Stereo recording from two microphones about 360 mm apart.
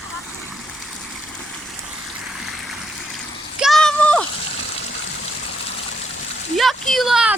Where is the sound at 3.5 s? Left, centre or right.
Centre.